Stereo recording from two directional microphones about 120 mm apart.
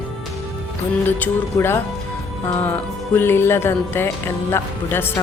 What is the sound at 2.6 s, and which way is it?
Music, 15° left (ahead or behind).